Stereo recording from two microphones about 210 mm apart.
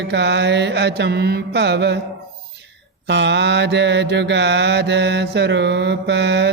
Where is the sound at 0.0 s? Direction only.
55° right (ahead or behind).